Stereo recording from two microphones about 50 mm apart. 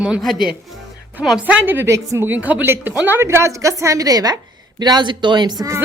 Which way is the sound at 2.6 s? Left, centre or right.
Right.